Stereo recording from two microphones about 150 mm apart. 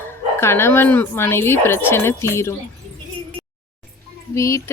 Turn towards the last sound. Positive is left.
turn(degrees=20)  # may be behind; listen again after turning